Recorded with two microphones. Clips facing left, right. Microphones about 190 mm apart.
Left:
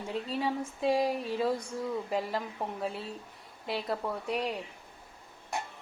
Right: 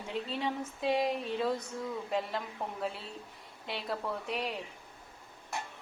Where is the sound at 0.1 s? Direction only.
5° left (ahead or behind).